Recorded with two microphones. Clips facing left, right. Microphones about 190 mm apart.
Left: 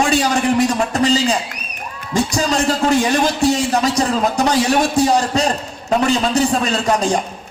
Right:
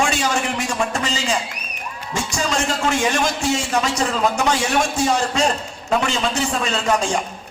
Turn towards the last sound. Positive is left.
turn(degrees=35)  # may be behind; listen again after turning